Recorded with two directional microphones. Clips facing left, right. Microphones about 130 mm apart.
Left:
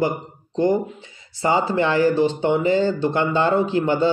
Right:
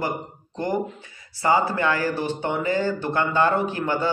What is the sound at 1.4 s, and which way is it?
Speech, 25° left (ahead or behind).